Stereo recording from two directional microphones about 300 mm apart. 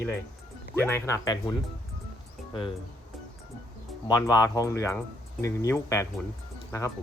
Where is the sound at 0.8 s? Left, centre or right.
Centre.